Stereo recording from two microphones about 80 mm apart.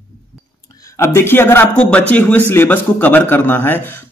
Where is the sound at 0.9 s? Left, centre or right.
Left.